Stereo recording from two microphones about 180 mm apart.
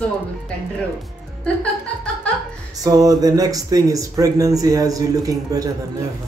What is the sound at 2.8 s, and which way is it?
Speech, 20° right (ahead or behind).